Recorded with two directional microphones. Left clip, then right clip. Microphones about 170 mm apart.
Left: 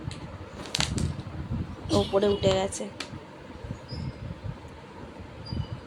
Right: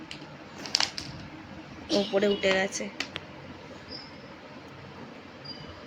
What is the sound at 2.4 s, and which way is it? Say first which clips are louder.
Speech: even; 10° left (ahead or behind).